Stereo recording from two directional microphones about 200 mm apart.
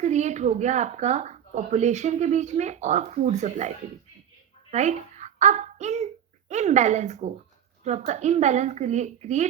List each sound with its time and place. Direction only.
0.0 s a child's voice: 35° right (ahead or behind)